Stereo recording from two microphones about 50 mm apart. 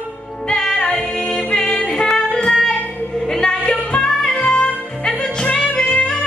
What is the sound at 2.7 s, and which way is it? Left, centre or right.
Music, left.